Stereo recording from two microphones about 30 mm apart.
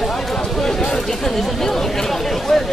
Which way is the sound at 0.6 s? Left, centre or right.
Centre.